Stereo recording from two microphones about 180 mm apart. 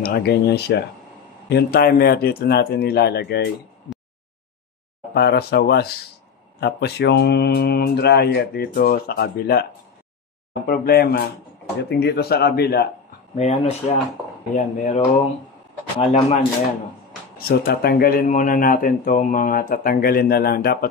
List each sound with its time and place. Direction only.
0.0 s speech: 60° left (ahead or behind)
5.1 s speech: 65° left (ahead or behind)
10.7 s speech: 60° left (ahead or behind)
13.3 s speech: 40° left (ahead or behind)
16.0 s speech: 40° left (ahead or behind)
17.4 s speech: 55° left (ahead or behind)